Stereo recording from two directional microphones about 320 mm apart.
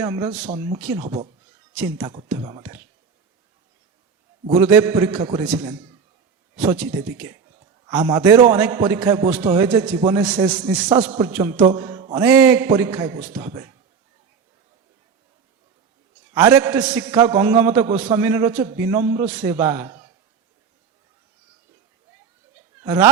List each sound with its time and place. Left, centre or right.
0.0 s a man's voice: centre
1.0 s a man's voice: centre
4.4 s a man's voice: centre
16.3 s a man's voice: centre
22.8 s speech: centre